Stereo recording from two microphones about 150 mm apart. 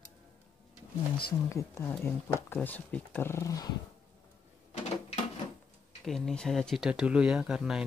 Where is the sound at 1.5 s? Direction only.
20° left (ahead or behind).